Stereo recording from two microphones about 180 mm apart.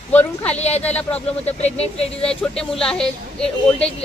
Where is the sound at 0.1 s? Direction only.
10° left (ahead or behind).